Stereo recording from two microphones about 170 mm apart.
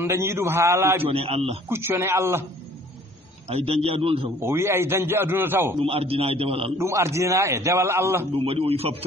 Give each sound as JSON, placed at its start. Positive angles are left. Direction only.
{"t": 0.0, "sound": "a man's voice", "side_deg": -15}
{"t": 1.0, "sound": "a man's voice", "side_deg": -35}
{"t": 1.7, "sound": "a man's voice", "side_deg": -15}
{"t": 3.4, "sound": "a man's voice", "side_deg": -35}
{"t": 4.4, "sound": "a man's voice", "side_deg": -15}
{"t": 5.8, "sound": "a man's voice", "side_deg": -35}
{"t": 6.8, "sound": "a man's voice", "side_deg": -15}
{"t": 8.3, "sound": "a man's voice", "side_deg": -35}